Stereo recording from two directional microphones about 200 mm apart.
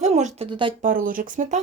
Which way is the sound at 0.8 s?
45° right (ahead or behind).